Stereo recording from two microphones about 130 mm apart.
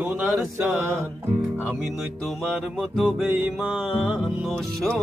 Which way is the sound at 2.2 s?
Centre (ahead or behind).